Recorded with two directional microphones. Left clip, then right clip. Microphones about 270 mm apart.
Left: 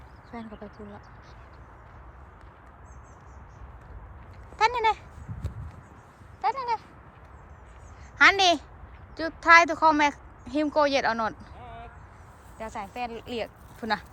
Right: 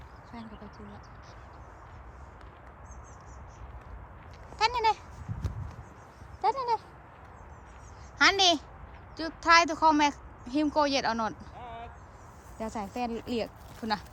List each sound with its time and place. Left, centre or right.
0.3 s speech: centre
4.5 s a sound: centre
6.4 s speech: centre
8.2 s speech: centre
11.5 s a sound: centre
12.5 s speech: centre